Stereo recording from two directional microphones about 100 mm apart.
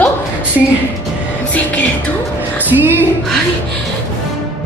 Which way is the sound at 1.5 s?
15° left (ahead or behind).